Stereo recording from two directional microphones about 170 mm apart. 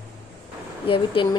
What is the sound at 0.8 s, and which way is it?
Speech, 30° left (ahead or behind).